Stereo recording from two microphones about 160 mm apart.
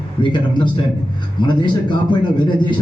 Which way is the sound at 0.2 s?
30° left (ahead or behind).